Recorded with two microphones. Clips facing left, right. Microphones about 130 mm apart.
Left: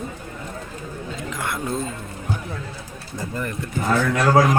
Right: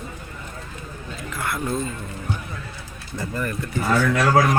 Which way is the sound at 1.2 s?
20° left (ahead or behind).